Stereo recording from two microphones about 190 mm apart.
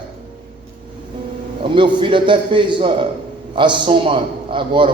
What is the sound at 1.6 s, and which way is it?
A man's voice, 25° right (ahead or behind).